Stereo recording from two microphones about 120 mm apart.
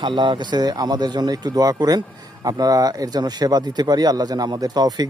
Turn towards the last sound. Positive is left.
turn(degrees=-35)  # may be behind; listen again after turning